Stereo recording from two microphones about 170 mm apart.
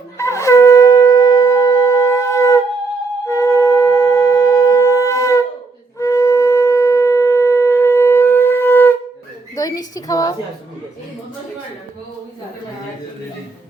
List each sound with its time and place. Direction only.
0.2 s shofar: 15° left (ahead or behind)
3.2 s wind instrument: 15° left (ahead or behind)
9.6 s a woman's voice: 20° left (ahead or behind)